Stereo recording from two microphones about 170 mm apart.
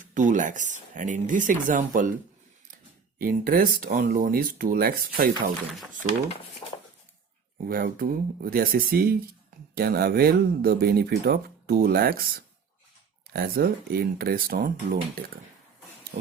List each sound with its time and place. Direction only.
0.0 s speech: 50° right (ahead or behind)
3.2 s speech: 55° right (ahead or behind)
6.6 s a sound: 30° left (ahead or behind)
7.7 s speech: 60° right (ahead or behind)
13.3 s speech: 60° right (ahead or behind)